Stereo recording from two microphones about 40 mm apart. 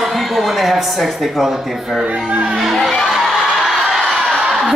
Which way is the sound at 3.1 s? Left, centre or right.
Centre.